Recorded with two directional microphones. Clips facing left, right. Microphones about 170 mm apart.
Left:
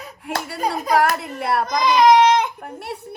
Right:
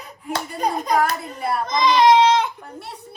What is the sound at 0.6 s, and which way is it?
Hands, 5° left (ahead or behind).